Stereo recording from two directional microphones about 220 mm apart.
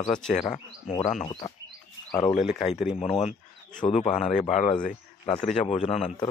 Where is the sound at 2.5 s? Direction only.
30° left (ahead or behind).